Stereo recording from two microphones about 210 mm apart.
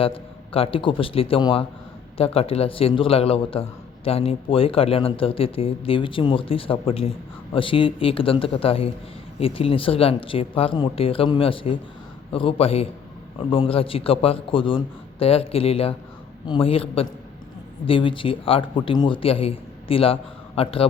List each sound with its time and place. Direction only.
0.0 s a man's voice: 25° left (ahead or behind)